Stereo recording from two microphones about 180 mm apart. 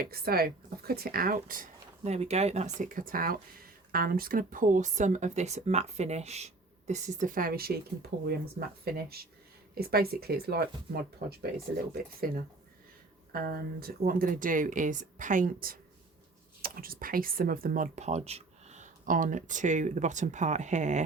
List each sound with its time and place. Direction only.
0.0 s speech: 55° right (ahead or behind)
2.0 s speech: 35° right (ahead or behind); by 7.8 s 60° right (ahead or behind)
8.1 s speech: 75° right (ahead or behind)
8.5 s speech: 60° right (ahead or behind); by 21.0 s 40° right (ahead or behind)